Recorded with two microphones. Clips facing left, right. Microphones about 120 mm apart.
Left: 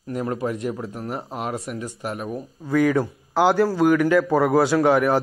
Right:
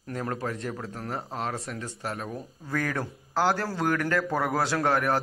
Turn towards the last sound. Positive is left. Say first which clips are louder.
# left 7 dB
turn(degrees=10)  # may be behind; listen again after turning